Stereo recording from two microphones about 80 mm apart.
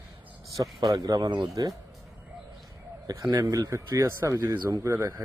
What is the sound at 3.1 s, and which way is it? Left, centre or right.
Speech, right.